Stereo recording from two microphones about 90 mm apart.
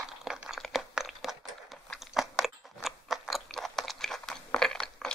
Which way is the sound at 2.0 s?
5° right (ahead or behind).